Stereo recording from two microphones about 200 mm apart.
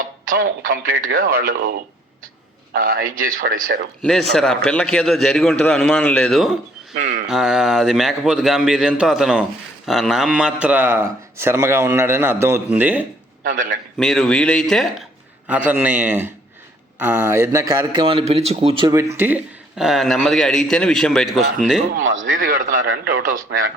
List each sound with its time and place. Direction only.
0.3 s a man's voice: 45° right (ahead or behind)
4.0 s a man's voice: centre (ahead or behind)
6.9 s speech: 40° right (ahead or behind)
7.3 s a man's voice: 5° right (ahead or behind)
13.4 s a man's voice: 45° right (ahead or behind)
14.0 s a man's voice: centre (ahead or behind); by 18.9 s 25° right (ahead or behind)
19.1 s a man's voice: 10° right (ahead or behind)
22.0 s a man's voice: 75° right (ahead or behind)
22.4 s a man's voice: 45° right (ahead or behind)